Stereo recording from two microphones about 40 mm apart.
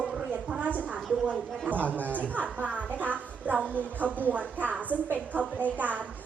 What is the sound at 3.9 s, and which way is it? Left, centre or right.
A woman's voice, right.